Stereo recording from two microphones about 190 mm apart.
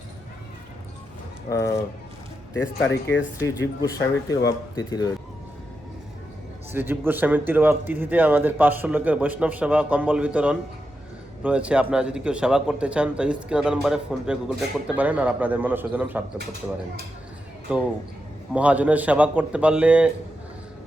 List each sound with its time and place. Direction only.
1.5 s speech: 15° left (ahead or behind)
2.9 s speech: 65° left (ahead or behind)
3.4 s speech: 20° left (ahead or behind)
6.7 s a man's voice: 10° right (ahead or behind)
17.7 s a man's voice: 5° right (ahead or behind)